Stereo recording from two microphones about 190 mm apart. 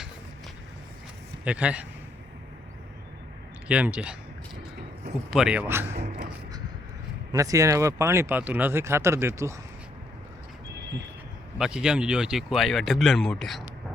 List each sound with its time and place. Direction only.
1.5 s speech: 5° right (ahead or behind)
3.7 s speech: 5° right (ahead or behind)
5.3 s speech: 5° right (ahead or behind)
5.9 s music: 35° right (ahead or behind)
7.3 s speech: 15° right (ahead or behind)
11.5 s speech: 5° right (ahead or behind)